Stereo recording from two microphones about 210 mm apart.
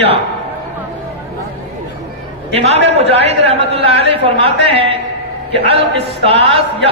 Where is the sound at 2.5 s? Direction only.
30° right (ahead or behind).